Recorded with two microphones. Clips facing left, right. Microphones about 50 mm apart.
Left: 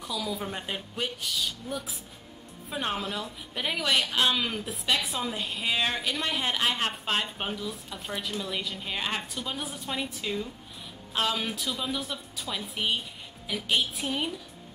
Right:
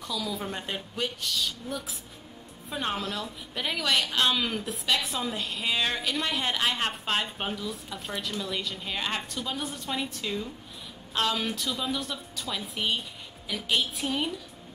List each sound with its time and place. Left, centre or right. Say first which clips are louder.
0.2 s a woman's voice: even; centre